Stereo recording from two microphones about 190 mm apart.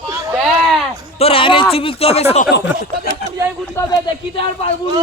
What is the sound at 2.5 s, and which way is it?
Speech, 65° left (ahead or behind).